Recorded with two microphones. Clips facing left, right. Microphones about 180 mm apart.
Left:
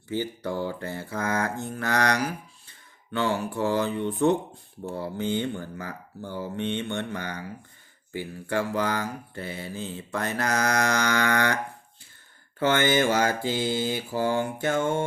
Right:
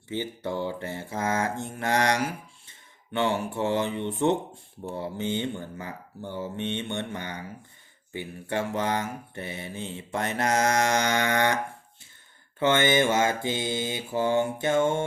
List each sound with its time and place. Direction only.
0.1 s mantra: 20° right (ahead or behind)